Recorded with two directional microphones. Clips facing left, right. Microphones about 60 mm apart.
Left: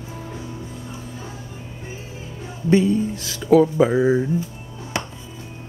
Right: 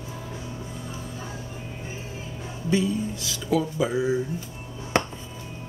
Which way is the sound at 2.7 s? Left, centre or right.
Left.